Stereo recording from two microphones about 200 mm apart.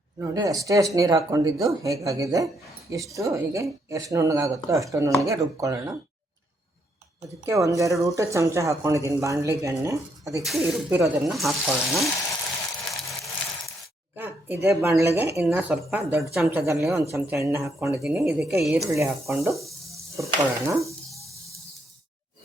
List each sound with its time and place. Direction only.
0.2 s speech: 15° right (ahead or behind)
7.4 s speech: 15° right (ahead or behind)
10.4 s speech: centre (ahead or behind)
10.9 s speech: 10° right (ahead or behind)
11.3 s speech: centre (ahead or behind)
14.2 s a sound: 10° right (ahead or behind)
15.0 s speech: 10° right (ahead or behind)
18.0 s speech: 5° right (ahead or behind)
18.8 s speech: 15° right (ahead or behind)